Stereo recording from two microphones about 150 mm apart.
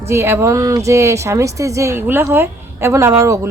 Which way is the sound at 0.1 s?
15° right (ahead or behind).